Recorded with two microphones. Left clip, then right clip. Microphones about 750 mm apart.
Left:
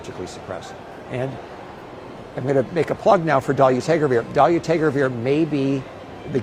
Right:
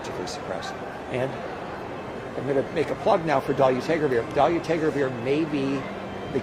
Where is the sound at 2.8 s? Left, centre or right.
Left.